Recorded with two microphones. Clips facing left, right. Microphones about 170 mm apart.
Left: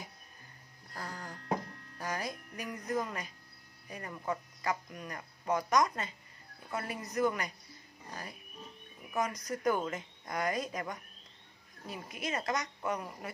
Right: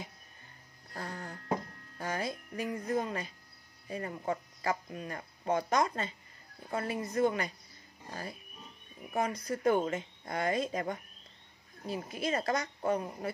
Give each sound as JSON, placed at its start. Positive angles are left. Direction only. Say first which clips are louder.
{"t": 0.9, "sound": "a sound", "louder": "right 2 dB", "side_deg": -25}
{"t": 2.0, "sound": "speech", "louder": "right 2 dB", "side_deg": -25}
{"t": 8.1, "sound": "pig", "louder": "right 3 dB", "side_deg": -30}
{"t": 9.1, "sound": "speech", "louder": "right 2 dB", "side_deg": -30}